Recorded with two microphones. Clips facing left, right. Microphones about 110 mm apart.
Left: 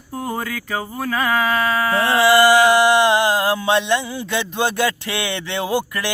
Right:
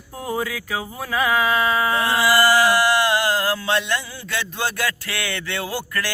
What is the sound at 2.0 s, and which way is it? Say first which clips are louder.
Speech: left 7 dB; 30° left (ahead or behind).